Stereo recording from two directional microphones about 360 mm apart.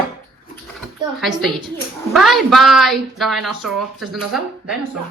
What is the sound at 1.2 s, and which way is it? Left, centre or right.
Speech, centre.